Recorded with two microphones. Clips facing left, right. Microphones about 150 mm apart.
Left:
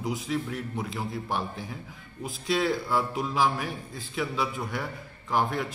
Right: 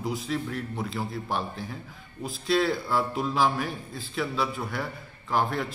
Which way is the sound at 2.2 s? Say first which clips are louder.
Right 2 dB; 15° left (ahead or behind).